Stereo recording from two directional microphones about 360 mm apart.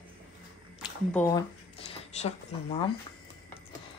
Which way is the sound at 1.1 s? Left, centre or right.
Centre.